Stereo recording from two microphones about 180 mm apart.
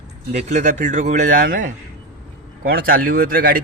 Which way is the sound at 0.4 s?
40° right (ahead or behind).